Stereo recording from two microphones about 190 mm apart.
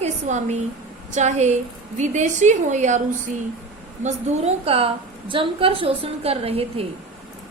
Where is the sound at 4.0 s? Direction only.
35° right (ahead or behind).